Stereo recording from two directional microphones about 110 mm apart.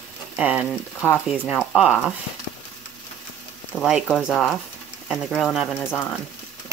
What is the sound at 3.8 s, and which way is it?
Speech, 5° right (ahead or behind).